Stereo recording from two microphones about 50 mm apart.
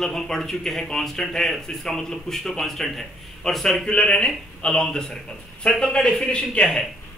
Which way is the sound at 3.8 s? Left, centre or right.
Centre.